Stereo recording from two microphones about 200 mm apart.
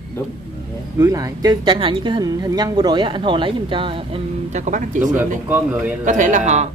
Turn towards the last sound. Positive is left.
turn(degrees=-35)  # may be behind; listen again after turning